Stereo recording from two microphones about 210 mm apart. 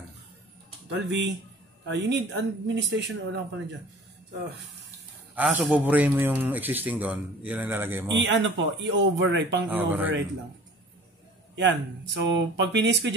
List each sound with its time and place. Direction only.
0.8 s speech: 55° right (ahead or behind)
5.3 s a man's voice: 10° right (ahead or behind)
8.1 s speech: 60° right (ahead or behind)
9.7 s a man's voice: 10° right (ahead or behind)
11.5 s speech: 60° right (ahead or behind)